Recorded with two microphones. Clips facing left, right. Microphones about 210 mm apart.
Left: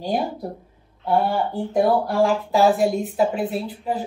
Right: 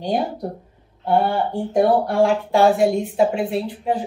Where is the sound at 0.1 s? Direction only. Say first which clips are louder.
Right 2 dB; centre (ahead or behind).